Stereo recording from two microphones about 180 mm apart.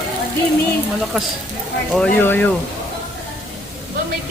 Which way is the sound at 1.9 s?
10° left (ahead or behind).